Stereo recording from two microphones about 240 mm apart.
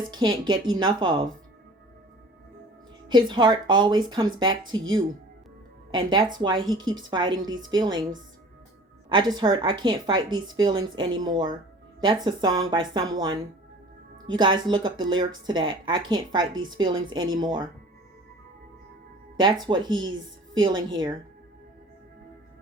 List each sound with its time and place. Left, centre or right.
0.1 s speech: centre
3.1 s speech: centre
5.9 s a woman's voice: centre
9.0 s a woman's voice: centre
19.4 s a woman's voice: centre
19.9 s speech: right
20.6 s a woman's voice: centre